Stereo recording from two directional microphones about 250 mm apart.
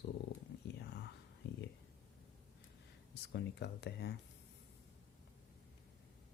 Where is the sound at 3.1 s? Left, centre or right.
Left.